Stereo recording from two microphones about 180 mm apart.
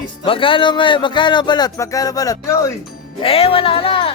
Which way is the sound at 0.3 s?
30° left (ahead or behind).